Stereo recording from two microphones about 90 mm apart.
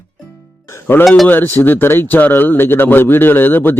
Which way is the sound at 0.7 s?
25° left (ahead or behind).